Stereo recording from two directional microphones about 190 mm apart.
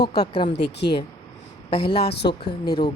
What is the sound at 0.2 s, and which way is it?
Speech, 25° left (ahead or behind).